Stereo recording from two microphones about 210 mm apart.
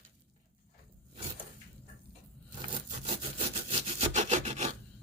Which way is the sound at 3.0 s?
25° right (ahead or behind).